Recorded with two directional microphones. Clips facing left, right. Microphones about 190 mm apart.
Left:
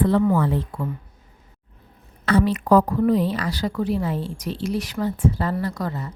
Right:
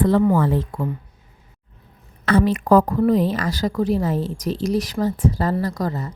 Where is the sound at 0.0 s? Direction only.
40° right (ahead or behind).